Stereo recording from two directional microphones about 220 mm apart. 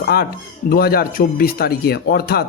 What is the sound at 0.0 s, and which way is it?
A woman's voice, 45° left (ahead or behind).